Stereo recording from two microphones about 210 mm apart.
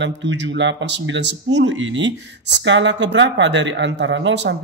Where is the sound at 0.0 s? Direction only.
60° right (ahead or behind).